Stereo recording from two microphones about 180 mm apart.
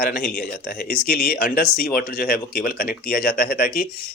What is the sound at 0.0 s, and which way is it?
Speech, 55° left (ahead or behind).